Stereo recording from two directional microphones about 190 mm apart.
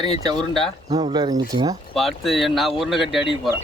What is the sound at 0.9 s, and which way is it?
Speech, 35° right (ahead or behind).